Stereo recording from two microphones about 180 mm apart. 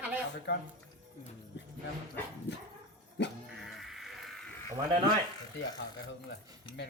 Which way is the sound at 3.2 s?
75° left (ahead or behind).